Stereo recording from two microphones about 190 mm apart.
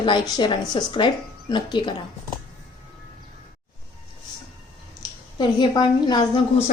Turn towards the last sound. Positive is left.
turn(degrees=20)  # may be behind; listen again after turning